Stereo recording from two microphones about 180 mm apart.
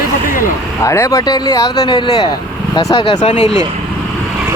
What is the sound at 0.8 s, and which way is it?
Speech, 15° left (ahead or behind).